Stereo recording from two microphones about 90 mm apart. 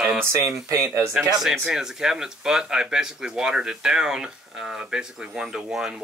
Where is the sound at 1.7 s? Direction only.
5° right (ahead or behind).